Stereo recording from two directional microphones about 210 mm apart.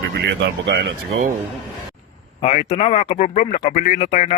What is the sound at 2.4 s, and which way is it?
Speech, 30° left (ahead or behind).